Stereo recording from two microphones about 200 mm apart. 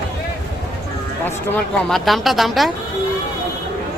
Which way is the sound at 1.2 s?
10° left (ahead or behind).